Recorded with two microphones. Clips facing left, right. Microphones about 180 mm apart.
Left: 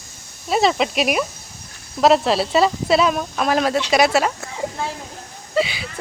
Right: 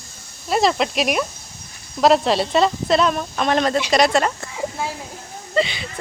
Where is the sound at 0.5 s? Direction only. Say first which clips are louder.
Left 1 dB; centre (ahead or behind).